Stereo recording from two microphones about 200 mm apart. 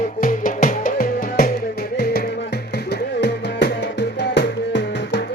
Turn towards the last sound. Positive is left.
turn(degrees=60)  # may be behind; listen again after turning